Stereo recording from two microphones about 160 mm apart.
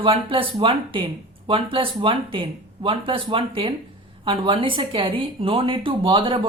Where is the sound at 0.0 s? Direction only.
35° right (ahead or behind).